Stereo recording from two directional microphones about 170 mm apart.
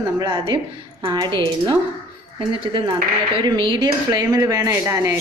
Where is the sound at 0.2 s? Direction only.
25° right (ahead or behind).